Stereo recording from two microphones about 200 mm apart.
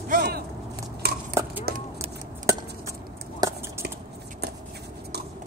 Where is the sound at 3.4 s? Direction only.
20° right (ahead or behind).